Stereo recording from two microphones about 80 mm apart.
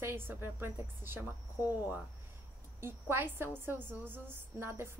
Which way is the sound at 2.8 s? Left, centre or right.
Right.